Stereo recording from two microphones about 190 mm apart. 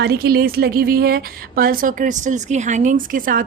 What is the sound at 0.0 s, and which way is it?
A woman's voice, 55° right (ahead or behind).